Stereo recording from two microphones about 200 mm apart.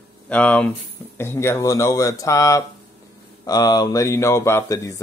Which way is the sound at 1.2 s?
10° left (ahead or behind).